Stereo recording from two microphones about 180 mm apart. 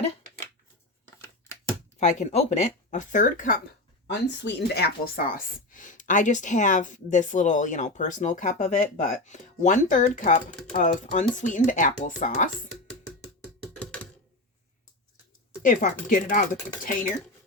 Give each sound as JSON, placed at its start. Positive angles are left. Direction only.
{"t": 2.0, "sound": "speech", "side_deg": 40}
{"t": 4.0, "sound": "speech", "side_deg": 75}
{"t": 13.7, "sound": "computer keyboard", "side_deg": 10}
{"t": 15.6, "sound": "speech", "side_deg": 45}